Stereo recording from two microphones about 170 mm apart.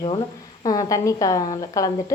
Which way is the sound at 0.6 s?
20° left (ahead or behind).